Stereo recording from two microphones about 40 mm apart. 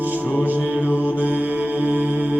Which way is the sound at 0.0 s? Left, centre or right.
Right.